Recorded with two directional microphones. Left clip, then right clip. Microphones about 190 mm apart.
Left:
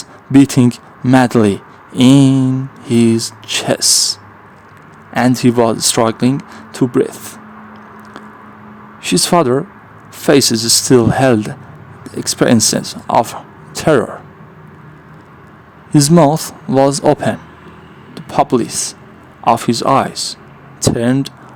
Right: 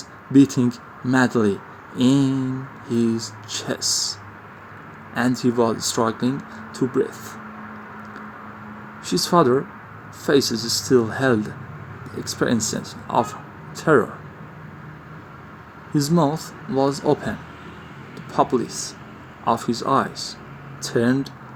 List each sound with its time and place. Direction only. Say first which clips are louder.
0.3 s speech: left 7 dB; 60° left (ahead or behind)
9.0 s speech: left 5 dB; 55° left (ahead or behind)
15.9 s speech: left 11 dB; 60° left (ahead or behind)